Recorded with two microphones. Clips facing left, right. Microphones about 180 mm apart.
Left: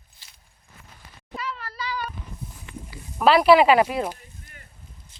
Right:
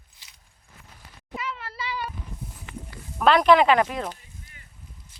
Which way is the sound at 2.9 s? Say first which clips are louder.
Left 1 dB; 5° left (ahead or behind).